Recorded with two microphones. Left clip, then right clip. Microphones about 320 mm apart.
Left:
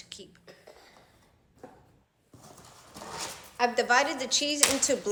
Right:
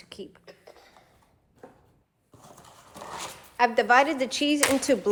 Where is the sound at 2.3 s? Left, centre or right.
Right.